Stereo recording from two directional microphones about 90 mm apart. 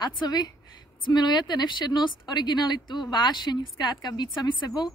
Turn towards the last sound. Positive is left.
turn(degrees=50)  # may be behind; listen again after turning